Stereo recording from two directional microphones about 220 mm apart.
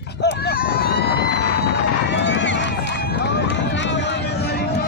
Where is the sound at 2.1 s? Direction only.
55° left (ahead or behind).